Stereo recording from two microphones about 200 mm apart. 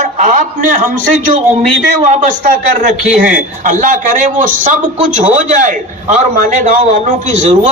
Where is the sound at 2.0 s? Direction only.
40° right (ahead or behind).